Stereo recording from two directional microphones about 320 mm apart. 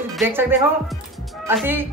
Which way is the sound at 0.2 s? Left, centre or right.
Centre.